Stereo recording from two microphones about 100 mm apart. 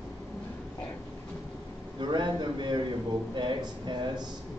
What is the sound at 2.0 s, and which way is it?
A man's voice, 50° right (ahead or behind).